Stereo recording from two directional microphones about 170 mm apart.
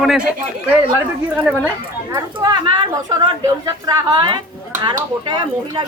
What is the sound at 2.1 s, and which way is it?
Speech, 25° right (ahead or behind).